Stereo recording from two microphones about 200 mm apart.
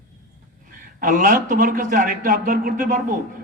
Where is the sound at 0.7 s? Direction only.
40° right (ahead or behind).